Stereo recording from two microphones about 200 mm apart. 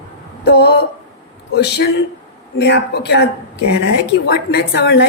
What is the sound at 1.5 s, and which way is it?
A woman's voice, 55° left (ahead or behind).